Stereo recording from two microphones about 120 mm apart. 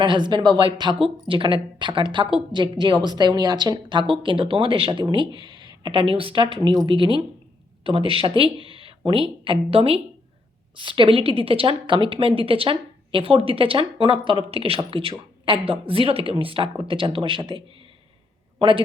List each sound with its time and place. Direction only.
0.0 s a woman's voice: 40° right (ahead or behind)